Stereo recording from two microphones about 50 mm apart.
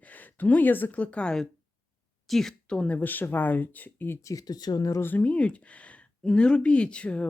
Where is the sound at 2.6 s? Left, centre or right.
Left.